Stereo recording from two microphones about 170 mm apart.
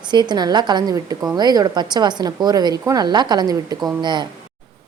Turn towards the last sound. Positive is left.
turn(degrees=-25)  # may be behind; listen again after turning